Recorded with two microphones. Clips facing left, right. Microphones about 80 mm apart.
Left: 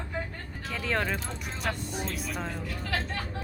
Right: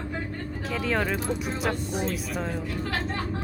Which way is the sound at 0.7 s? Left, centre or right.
Centre.